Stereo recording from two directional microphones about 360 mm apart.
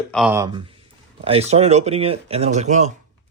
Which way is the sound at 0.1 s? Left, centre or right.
Centre.